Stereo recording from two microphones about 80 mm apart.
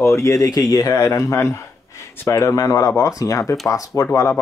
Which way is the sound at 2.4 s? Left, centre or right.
Left.